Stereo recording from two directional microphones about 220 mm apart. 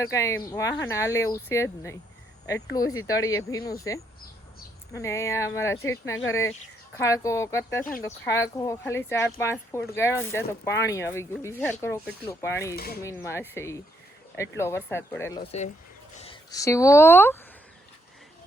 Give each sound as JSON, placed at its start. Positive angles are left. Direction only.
{"t": 0.0, "sound": "speech", "side_deg": 15}
{"t": 12.7, "sound": "speech", "side_deg": 45}
{"t": 13.0, "sound": "speech", "side_deg": 10}
{"t": 14.8, "sound": "a woman's voice", "side_deg": 10}